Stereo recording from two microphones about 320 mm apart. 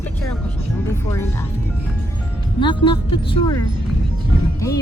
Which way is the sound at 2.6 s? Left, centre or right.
Centre.